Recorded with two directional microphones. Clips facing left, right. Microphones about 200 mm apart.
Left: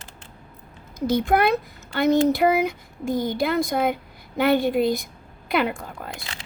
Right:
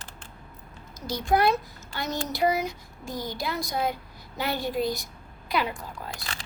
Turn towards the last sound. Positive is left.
turn(degrees=25)  # may be behind; listen again after turning